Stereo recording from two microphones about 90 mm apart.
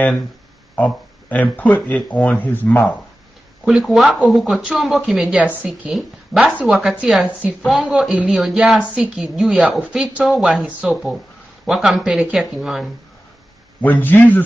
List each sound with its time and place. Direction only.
0.7 s speech: 15° left (ahead or behind)
3.6 s a woman's voice: 5° right (ahead or behind)
10.3 s speech: centre (ahead or behind)
10.6 s a woman's voice: 10° right (ahead or behind)
13.7 s a man's voice: 20° left (ahead or behind)